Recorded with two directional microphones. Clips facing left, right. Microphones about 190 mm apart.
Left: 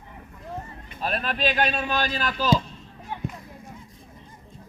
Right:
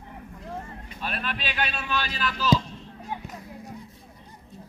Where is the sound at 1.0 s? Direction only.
40° left (ahead or behind).